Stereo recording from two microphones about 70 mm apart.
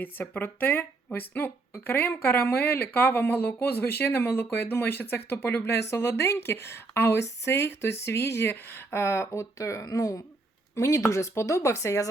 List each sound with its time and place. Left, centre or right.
0.0 s speech: left
5.6 s speech: left